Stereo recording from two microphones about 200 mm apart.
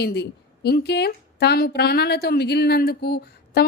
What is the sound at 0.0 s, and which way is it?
A woman's voice, 55° left (ahead or behind).